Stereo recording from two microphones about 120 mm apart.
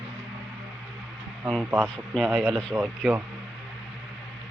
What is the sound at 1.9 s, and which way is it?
Speech, 5° left (ahead or behind).